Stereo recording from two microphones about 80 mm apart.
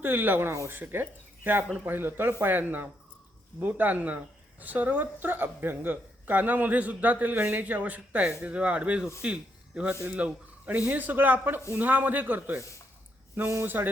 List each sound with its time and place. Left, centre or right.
0.0 s speech: right